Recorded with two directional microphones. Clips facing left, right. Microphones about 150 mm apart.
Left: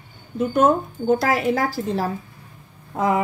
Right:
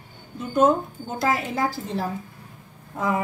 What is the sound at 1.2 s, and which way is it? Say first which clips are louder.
A woman's voice: left 3 dB; 85° left.